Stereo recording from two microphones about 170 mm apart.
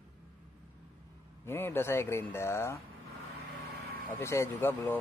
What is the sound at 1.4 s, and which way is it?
Speech, 15° left (ahead or behind).